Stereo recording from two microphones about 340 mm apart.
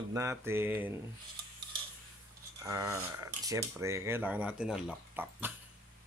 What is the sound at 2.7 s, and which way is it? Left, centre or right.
Speech, centre.